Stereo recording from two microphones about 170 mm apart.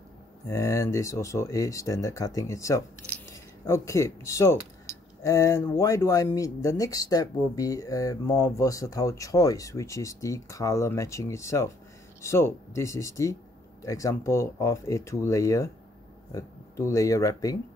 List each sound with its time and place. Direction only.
0.5 s speech: 15° left (ahead or behind)